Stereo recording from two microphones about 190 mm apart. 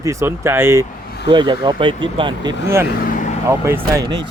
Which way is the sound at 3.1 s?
40° left (ahead or behind).